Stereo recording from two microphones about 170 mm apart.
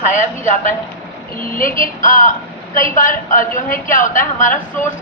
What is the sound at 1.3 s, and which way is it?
A woman's voice, 55° left (ahead or behind).